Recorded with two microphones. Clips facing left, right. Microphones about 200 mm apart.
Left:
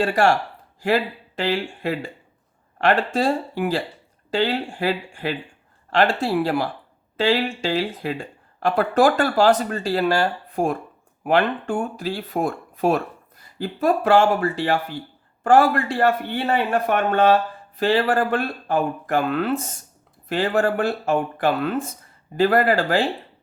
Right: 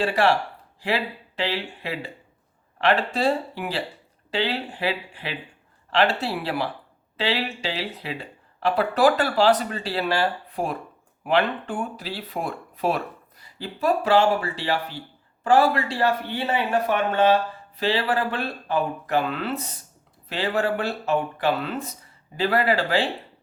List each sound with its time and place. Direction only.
0.0 s a man's voice: 45° left (ahead or behind)